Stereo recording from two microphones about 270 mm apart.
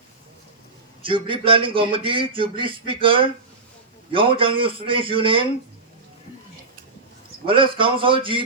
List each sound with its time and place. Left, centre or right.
1.0 s a man's voice: centre
7.4 s a man's voice: centre